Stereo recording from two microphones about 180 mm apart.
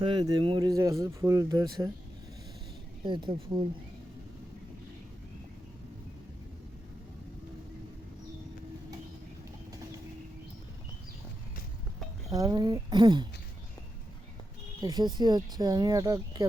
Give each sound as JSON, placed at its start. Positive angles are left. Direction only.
{"t": 0.0, "sound": "speech", "side_deg": -25}
{"t": 3.0, "sound": "speech", "side_deg": -25}
{"t": 12.3, "sound": "speech", "side_deg": -20}
{"t": 14.8, "sound": "speech", "side_deg": -20}